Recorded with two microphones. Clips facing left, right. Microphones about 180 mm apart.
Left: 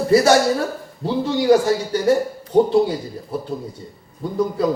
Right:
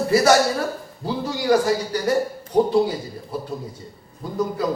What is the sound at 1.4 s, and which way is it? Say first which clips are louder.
Speech: left 2 dB; 25° left (ahead or behind).